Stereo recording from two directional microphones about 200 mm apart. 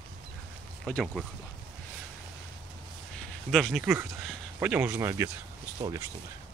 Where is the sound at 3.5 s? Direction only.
Centre (ahead or behind).